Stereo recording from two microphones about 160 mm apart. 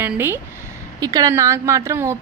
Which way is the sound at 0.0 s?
15° right (ahead or behind).